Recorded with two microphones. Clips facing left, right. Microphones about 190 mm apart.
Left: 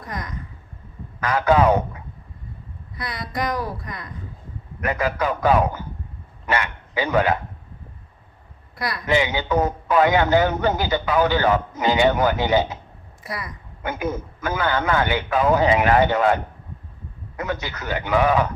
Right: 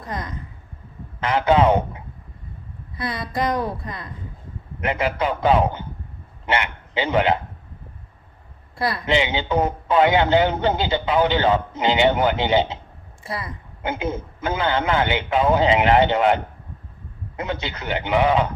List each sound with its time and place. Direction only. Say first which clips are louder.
0.0 s a man's voice: right 2 dB; 25° right (ahead or behind)
8.8 s a man's voice: even; 25° right (ahead or behind)